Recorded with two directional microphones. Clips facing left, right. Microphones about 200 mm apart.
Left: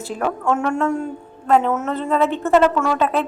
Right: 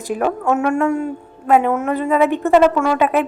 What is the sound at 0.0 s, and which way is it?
A woman's voice, 10° right (ahead or behind).